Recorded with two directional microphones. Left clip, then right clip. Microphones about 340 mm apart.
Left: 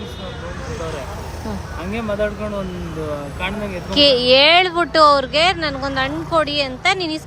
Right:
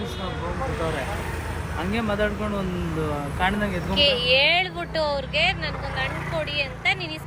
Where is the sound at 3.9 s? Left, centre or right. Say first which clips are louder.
Left 7 dB; centre.